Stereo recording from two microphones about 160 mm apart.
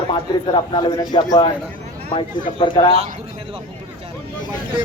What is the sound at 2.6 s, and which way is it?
Speech, 30° left (ahead or behind).